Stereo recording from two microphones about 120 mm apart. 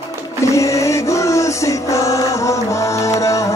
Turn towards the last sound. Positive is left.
turn(degrees=25)  # may be behind; listen again after turning